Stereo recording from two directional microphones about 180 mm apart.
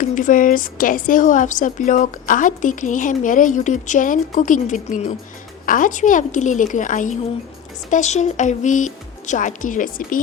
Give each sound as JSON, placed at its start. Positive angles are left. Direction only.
{"t": 0.0, "sound": "a woman's voice", "side_deg": 45}